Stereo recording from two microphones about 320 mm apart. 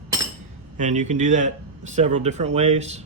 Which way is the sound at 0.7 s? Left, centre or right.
Right.